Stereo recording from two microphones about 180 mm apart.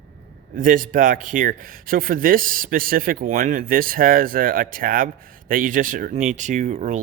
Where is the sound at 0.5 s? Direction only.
50° right (ahead or behind).